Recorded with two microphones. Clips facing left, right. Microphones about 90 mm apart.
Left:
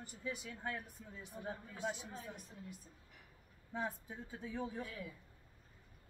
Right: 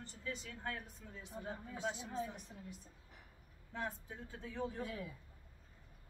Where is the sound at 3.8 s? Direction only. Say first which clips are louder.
Left 2 dB; 10° left (ahead or behind).